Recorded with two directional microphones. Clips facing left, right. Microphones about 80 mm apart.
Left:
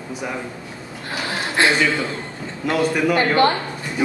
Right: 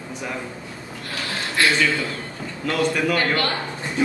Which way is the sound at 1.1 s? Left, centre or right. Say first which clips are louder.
Left 3 dB; left.